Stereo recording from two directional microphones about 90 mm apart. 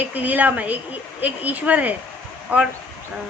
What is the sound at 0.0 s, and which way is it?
Speech, 20° right (ahead or behind).